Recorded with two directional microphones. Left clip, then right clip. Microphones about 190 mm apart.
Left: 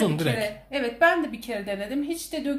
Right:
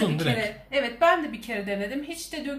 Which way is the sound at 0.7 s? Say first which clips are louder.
Even; 40° left (ahead or behind).